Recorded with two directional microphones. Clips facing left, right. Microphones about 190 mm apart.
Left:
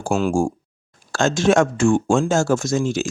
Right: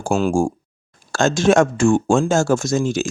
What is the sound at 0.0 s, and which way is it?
Speech, 35° right (ahead or behind).